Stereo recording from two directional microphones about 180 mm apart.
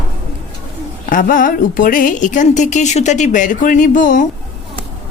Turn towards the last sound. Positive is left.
turn(degrees=45)  # may be behind; listen again after turning